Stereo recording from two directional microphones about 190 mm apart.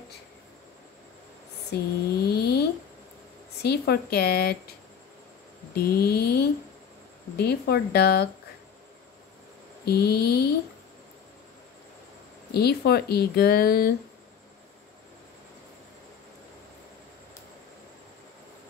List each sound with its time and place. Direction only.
1.7 s speech: 55° left (ahead or behind)
2.2 s a sound: 55° left (ahead or behind)
3.6 s speech: 60° left (ahead or behind)
5.8 s speech: 55° left (ahead or behind)
9.8 s speech: 55° left (ahead or behind)
12.5 s speech: 55° left (ahead or behind)